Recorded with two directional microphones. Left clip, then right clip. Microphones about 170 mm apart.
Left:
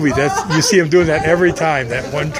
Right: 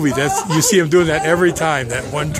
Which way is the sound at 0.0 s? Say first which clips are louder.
Left 2 dB; 25° right (ahead or behind).